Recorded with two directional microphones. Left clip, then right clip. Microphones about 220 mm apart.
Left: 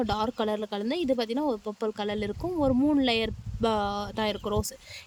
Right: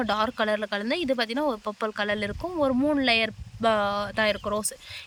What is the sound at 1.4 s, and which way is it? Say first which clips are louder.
Speech: right 2 dB; 20° right (ahead or behind).